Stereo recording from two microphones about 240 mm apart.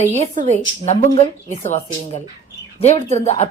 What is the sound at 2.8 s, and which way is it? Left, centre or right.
Speech, left.